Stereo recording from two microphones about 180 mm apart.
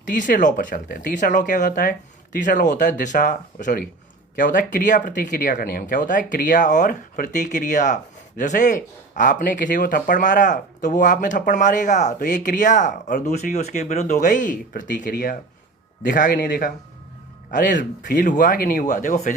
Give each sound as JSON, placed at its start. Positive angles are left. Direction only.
{"t": 0.0, "sound": "speech", "side_deg": 45}